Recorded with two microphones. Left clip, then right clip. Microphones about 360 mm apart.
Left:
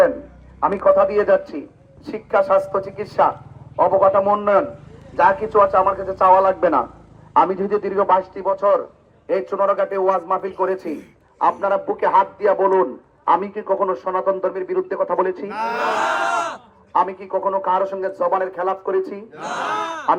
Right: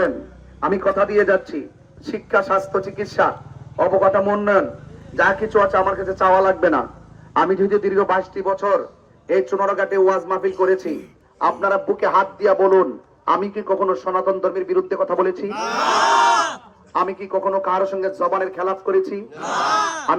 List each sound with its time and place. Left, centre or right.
0.6 s a man's voice: centre
16.5 s a man's voice: centre